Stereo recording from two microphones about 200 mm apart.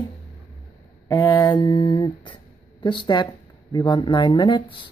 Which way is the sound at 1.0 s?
20° left (ahead or behind).